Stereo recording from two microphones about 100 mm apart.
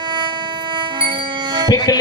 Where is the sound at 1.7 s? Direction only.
45° left (ahead or behind).